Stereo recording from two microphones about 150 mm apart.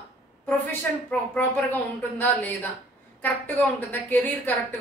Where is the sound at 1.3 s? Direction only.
10° left (ahead or behind).